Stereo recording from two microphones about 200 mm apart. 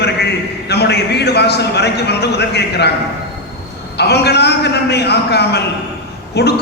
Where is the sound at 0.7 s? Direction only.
55° left (ahead or behind).